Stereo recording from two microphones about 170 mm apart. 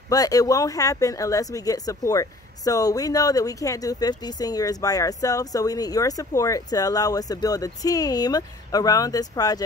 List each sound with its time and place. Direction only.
0.1 s speech: 20° left (ahead or behind)